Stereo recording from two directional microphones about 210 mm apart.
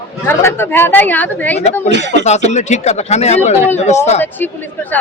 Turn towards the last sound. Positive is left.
turn(degrees=35)  # may be behind; listen again after turning